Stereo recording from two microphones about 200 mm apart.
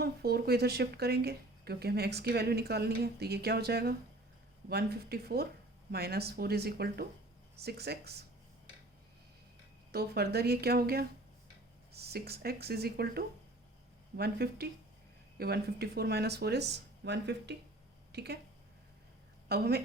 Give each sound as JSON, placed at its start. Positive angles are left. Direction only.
{"t": 0.0, "sound": "speech", "side_deg": -50}
{"t": 9.9, "sound": "speech", "side_deg": -50}
{"t": 19.5, "sound": "speech", "side_deg": -55}